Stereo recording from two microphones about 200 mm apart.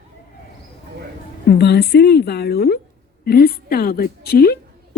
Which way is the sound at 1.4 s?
55° left (ahead or behind).